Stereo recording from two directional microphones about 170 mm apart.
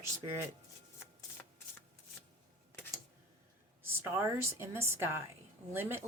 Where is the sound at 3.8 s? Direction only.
15° right (ahead or behind).